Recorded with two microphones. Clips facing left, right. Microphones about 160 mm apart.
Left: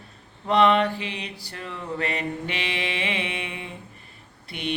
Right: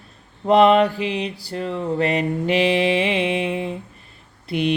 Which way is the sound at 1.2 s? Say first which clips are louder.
Right 10 dB; 35° right (ahead or behind).